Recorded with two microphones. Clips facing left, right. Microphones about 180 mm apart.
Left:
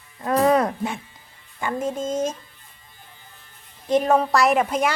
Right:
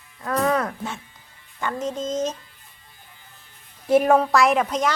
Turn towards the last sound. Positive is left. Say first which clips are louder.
# left 1 dB
turn(degrees=10)  # may be behind; listen again after turning